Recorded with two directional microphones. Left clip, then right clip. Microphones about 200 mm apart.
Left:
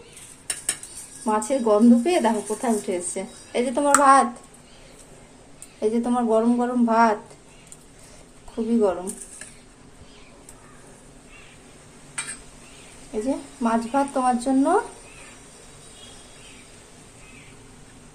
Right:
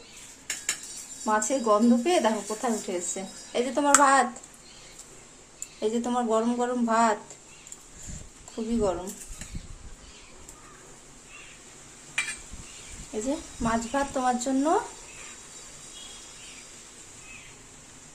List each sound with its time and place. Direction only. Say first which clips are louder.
1.2 s speech: left 3 dB; centre (ahead or behind)
5.8 s speech: left 4 dB; centre (ahead or behind)
8.5 s speech: left 6 dB; centre (ahead or behind)
13.6 s speech: left 5 dB; centre (ahead or behind)